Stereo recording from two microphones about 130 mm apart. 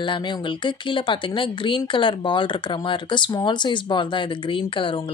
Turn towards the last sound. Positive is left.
turn(degrees=40)  # may be behind; listen again after turning